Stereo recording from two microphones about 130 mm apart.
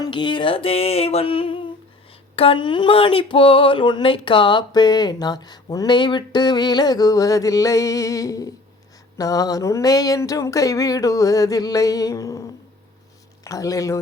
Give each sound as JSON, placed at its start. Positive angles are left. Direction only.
{"t": 0.0, "sound": "music", "side_deg": 35}
{"t": 2.3, "sound": "a sound", "side_deg": 45}
{"t": 13.4, "sound": "speech", "side_deg": 25}